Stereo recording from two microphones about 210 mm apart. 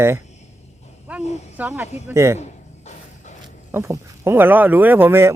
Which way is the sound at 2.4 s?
35° left (ahead or behind).